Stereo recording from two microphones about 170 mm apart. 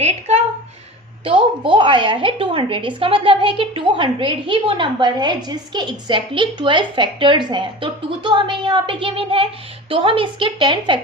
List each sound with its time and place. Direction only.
0.0 s a woman's voice: 40° right (ahead or behind)
1.6 s a woman's voice: 30° right (ahead or behind)